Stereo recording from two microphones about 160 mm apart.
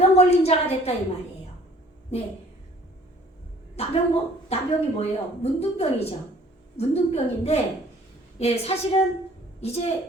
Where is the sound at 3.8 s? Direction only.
40° left (ahead or behind).